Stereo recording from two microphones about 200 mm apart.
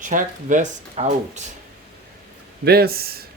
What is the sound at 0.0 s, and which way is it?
Speech, 40° right (ahead or behind).